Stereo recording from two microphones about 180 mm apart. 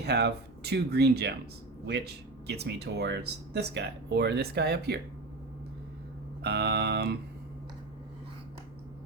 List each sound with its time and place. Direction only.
0.0 s speech: 65° right (ahead or behind)
6.4 s speech: 65° right (ahead or behind)